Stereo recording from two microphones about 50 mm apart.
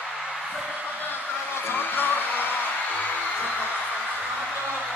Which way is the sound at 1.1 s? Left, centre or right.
Left.